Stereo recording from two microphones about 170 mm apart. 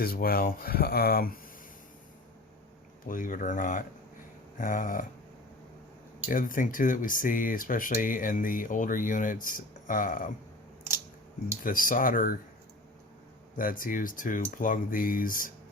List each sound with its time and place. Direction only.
0.0 s speech: 60° left (ahead or behind)
3.1 s speech: 50° left (ahead or behind)
6.3 s speech: 50° left (ahead or behind)
11.6 s speech: 55° left (ahead or behind)
13.6 s speech: 55° left (ahead or behind)